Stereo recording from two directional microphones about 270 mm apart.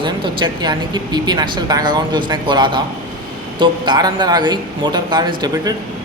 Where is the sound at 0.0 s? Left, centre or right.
Centre.